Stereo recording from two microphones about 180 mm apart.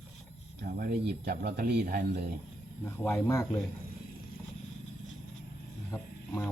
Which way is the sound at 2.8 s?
15° left (ahead or behind).